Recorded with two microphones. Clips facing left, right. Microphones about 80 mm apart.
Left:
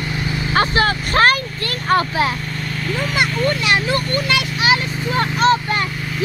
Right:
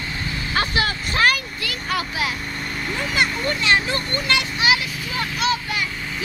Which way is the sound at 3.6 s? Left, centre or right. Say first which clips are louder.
Left 1 dB; centre.